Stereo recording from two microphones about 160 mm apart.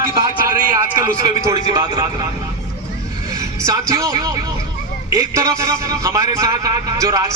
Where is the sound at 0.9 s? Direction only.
20° right (ahead or behind).